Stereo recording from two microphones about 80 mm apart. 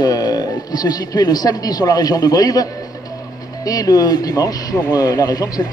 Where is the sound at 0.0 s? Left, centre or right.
Left.